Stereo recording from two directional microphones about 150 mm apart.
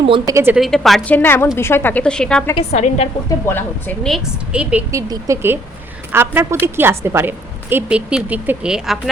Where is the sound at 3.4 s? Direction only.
15° left (ahead or behind).